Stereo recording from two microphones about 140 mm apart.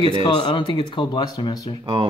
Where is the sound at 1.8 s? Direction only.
40° right (ahead or behind).